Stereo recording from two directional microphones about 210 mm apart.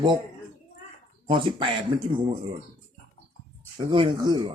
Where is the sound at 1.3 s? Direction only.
25° right (ahead or behind).